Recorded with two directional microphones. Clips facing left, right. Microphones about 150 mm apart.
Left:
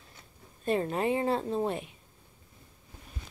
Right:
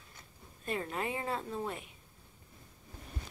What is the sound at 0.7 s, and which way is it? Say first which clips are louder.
Speech: left 8 dB; 30° left (ahead or behind).